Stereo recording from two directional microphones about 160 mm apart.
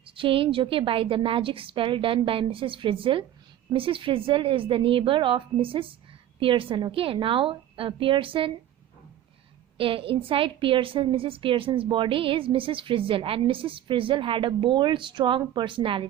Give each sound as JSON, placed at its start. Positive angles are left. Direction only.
{"t": 0.0, "sound": "a woman's voice", "side_deg": -35}
{"t": 9.7, "sound": "a woman's voice", "side_deg": -35}